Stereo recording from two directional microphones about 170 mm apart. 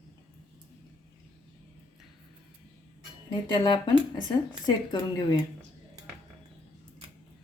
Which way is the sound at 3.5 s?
25° left (ahead or behind).